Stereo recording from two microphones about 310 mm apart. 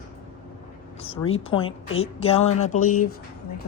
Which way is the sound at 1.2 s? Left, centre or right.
Centre.